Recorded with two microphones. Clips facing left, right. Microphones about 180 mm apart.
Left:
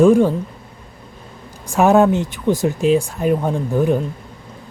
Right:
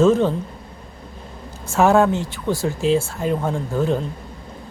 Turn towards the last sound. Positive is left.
turn(degrees=15)  # may be behind; listen again after turning